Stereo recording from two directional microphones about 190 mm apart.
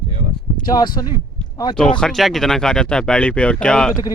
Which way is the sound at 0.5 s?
20° left (ahead or behind).